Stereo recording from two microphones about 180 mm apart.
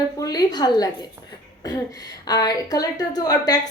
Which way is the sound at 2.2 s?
20° left (ahead or behind).